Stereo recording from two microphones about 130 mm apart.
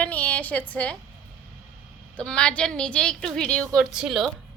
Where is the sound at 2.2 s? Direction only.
5° left (ahead or behind).